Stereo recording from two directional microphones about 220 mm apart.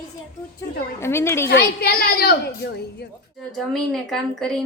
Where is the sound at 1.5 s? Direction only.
45° left (ahead or behind).